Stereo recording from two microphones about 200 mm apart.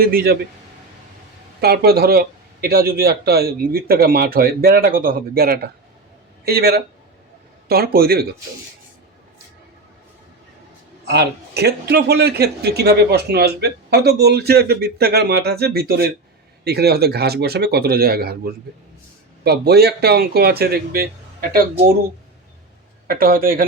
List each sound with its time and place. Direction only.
0.0 s a man's voice: 50° right (ahead or behind)
1.6 s a man's voice: 50° right (ahead or behind)
11.0 s a man's voice: 55° right (ahead or behind)
23.0 s a man's voice: 45° right (ahead or behind)